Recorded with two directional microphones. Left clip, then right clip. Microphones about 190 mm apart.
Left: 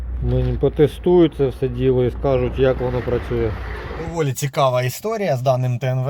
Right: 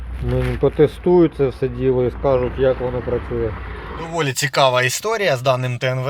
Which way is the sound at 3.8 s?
30° right (ahead or behind).